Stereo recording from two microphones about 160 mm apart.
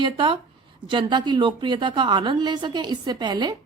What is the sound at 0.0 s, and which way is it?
Speech, 30° right (ahead or behind).